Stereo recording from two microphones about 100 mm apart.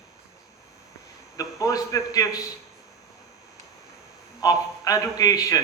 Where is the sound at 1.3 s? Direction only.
35° left (ahead or behind).